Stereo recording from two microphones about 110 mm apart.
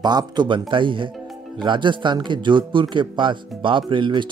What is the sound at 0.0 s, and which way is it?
Speech, 40° right (ahead or behind).